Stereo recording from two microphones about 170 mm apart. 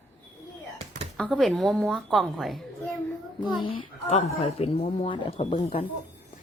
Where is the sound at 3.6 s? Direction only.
35° left (ahead or behind).